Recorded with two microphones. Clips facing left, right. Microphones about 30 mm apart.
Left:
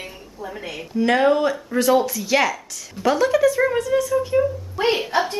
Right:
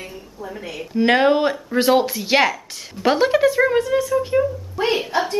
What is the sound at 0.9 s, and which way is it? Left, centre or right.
Speech, right.